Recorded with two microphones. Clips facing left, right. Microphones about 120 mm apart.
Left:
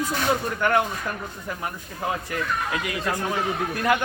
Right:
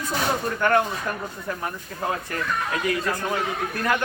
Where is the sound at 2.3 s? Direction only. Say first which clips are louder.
Even; 10° left (ahead or behind).